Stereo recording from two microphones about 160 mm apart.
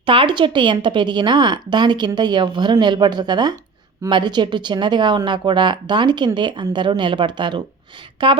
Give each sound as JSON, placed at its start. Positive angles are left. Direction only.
{"t": 0.0, "sound": "a woman's voice", "side_deg": -35}